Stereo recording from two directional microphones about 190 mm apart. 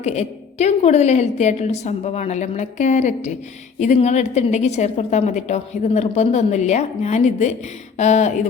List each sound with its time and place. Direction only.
0.0 s a woman's voice: 35° left (ahead or behind)